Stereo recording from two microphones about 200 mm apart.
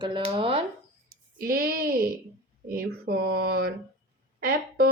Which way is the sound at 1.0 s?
45° right (ahead or behind).